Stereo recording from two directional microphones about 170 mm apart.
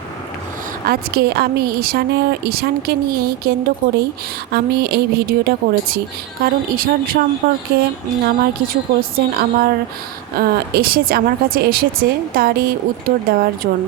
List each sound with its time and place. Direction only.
0.9 s a woman's voice: 65° right (ahead or behind)
4.5 s a woman's voice: 70° right (ahead or behind)